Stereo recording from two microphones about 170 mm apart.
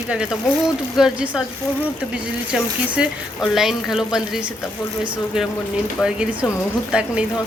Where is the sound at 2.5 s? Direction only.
5° right (ahead or behind).